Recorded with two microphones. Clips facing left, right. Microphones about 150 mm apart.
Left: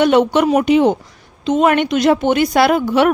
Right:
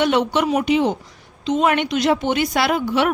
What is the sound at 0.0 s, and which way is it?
Speech, 50° left (ahead or behind).